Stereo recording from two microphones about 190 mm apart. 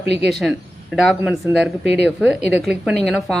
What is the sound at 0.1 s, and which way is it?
Speech, 60° right (ahead or behind).